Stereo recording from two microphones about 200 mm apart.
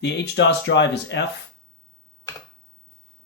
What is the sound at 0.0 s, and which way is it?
Speech, 60° left (ahead or behind).